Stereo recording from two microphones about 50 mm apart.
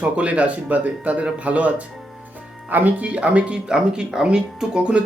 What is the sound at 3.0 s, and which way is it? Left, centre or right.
Speech, right.